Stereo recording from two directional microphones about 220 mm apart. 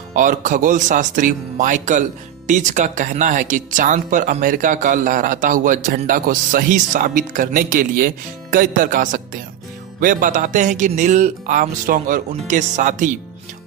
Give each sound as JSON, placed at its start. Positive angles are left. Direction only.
{"t": 0.1, "sound": "speech", "side_deg": -35}